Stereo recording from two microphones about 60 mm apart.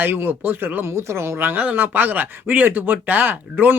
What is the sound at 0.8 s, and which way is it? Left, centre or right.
Speech, right.